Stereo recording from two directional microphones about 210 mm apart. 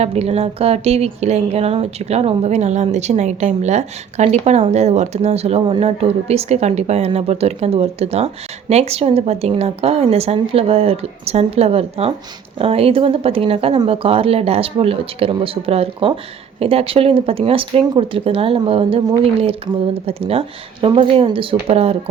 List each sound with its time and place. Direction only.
0.0 s speech: 30° right (ahead or behind)